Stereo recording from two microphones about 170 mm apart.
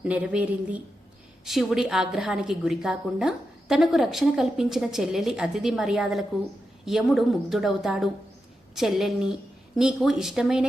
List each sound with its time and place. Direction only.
0.0 s a woman's voice: 5° right (ahead or behind)